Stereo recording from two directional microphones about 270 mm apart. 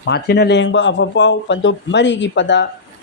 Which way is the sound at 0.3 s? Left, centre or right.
Left.